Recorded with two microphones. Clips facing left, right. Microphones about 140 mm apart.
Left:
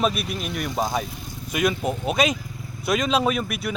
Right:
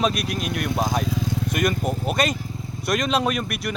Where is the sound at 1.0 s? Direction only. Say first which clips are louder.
Right 11 dB; 90° right.